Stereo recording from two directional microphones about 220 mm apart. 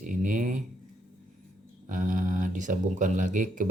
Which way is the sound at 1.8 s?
35° right (ahead or behind).